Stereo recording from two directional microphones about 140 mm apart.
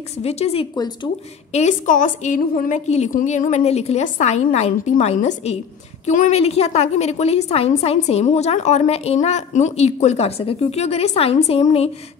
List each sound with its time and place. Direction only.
0.2 s a woman's voice: 50° left (ahead or behind)
0.7 s speech: 30° left (ahead or behind)
1.5 s a woman's voice: 55° left (ahead or behind)
6.0 s a woman's voice: 60° left (ahead or behind)
6.4 s a woman's voice: 45° left (ahead or behind)